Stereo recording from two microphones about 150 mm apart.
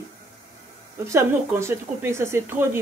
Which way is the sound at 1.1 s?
20° right (ahead or behind).